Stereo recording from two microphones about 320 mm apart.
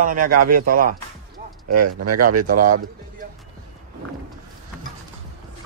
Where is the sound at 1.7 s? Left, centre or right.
Right.